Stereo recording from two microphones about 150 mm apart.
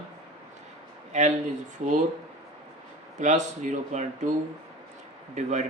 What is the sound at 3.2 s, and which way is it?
Speech, 50° right (ahead or behind).